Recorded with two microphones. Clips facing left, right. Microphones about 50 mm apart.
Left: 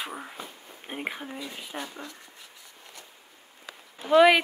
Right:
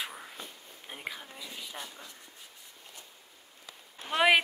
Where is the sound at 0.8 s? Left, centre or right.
Left.